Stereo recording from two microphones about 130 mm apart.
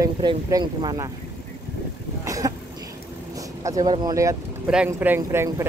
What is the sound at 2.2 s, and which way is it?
Cough, 25° right (ahead or behind).